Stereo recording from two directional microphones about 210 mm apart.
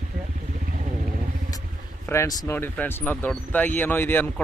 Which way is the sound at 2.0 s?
15° left (ahead or behind).